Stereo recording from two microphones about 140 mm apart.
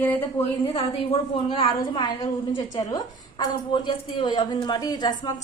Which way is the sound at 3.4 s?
35° left (ahead or behind).